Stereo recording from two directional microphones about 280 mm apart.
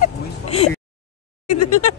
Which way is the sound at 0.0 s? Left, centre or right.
Left.